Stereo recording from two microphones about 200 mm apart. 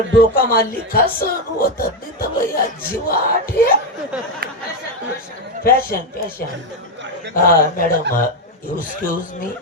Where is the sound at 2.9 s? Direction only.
45° left (ahead or behind).